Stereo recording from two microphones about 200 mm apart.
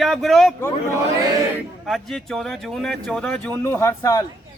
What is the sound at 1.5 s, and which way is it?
Speech, centre (ahead or behind).